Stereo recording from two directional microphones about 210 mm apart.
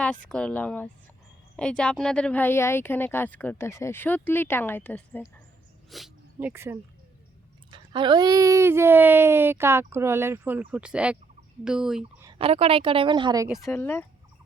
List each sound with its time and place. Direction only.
0.0 s speech: 5° left (ahead or behind)
5.9 s a sound: centre (ahead or behind)
6.5 s speech: 10° right (ahead or behind)
7.7 s speech: 20° right (ahead or behind); by 12.0 s 5° right (ahead or behind)
12.2 s a woman's voice: 25° right (ahead or behind)
13.7 s speech: 10° left (ahead or behind)